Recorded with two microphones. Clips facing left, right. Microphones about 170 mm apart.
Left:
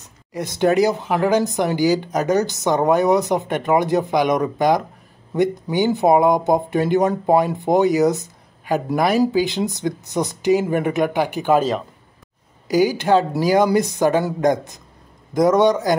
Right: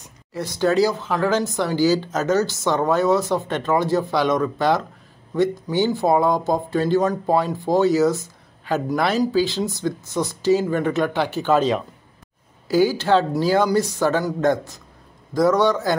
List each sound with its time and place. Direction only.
0.3 s speech: 20° left (ahead or behind)
5.9 s a man's voice: 20° left (ahead or behind)